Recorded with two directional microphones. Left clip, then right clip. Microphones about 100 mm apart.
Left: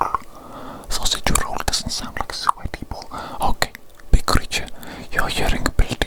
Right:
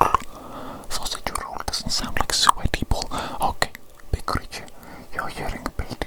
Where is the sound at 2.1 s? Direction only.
20° right (ahead or behind).